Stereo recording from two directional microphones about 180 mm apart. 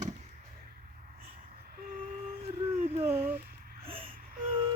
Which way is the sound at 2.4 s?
35° right (ahead or behind).